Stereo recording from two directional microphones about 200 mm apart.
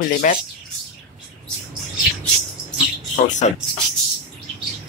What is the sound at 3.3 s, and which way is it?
Speech, 35° left (ahead or behind).